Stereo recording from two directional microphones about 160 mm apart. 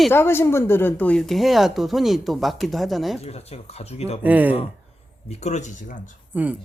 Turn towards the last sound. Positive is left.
turn(degrees=-10)  # may be behind; listen again after turning